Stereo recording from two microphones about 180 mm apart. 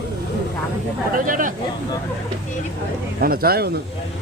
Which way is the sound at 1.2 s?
50° right (ahead or behind).